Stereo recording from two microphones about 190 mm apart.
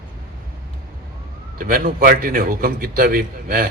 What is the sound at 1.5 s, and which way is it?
A man's voice, 45° right (ahead or behind).